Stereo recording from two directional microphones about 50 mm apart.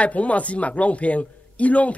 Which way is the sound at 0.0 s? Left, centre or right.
Left.